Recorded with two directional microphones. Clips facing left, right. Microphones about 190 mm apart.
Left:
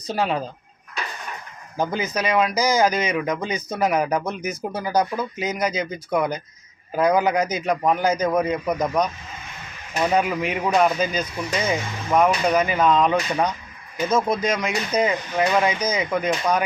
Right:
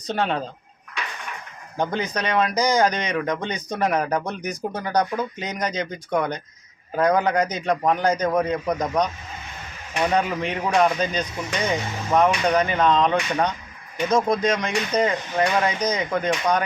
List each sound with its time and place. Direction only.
0.1 s speech: 5° left (ahead or behind)
1.8 s speech: 5° left (ahead or behind)
14.3 s speech: 5° left (ahead or behind)